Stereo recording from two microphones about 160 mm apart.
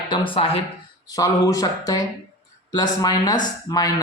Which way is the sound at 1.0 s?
20° left (ahead or behind).